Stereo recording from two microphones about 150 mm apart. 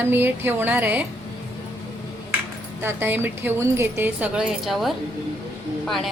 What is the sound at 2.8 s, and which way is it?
A woman's voice, 15° right (ahead or behind).